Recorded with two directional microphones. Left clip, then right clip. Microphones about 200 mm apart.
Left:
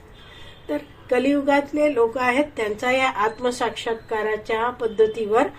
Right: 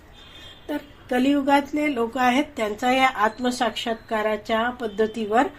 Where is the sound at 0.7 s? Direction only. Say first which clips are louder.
Left 3 dB; 35° right (ahead or behind).